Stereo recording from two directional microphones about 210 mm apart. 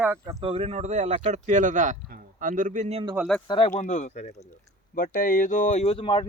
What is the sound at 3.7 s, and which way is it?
Speech, 35° left (ahead or behind).